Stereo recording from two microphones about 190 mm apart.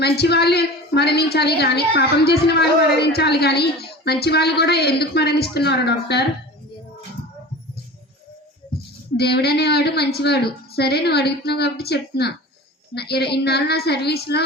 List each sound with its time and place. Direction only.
0.0 s a woman's voice: 55° left (ahead or behind)
9.1 s a woman's voice: 60° left (ahead or behind)